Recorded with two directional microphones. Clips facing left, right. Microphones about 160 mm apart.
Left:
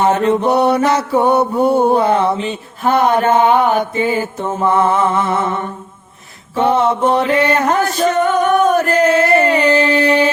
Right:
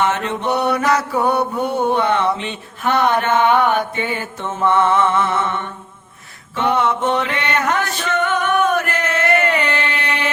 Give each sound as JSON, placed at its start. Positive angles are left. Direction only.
{"t": 0.0, "sound": "mantra", "side_deg": 35}